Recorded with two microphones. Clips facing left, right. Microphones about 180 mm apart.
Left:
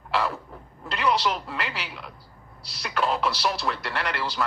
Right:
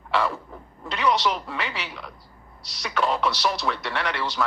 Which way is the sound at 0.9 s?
5° left (ahead or behind).